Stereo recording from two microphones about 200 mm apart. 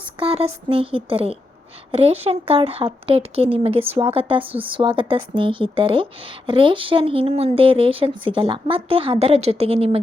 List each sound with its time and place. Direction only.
0.2 s speech: 30° right (ahead or behind)